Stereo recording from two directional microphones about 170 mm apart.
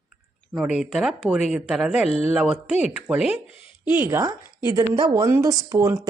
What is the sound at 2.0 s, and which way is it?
Speech, 40° left (ahead or behind).